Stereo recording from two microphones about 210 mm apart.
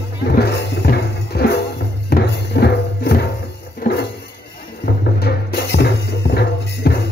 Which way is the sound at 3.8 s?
45° left (ahead or behind).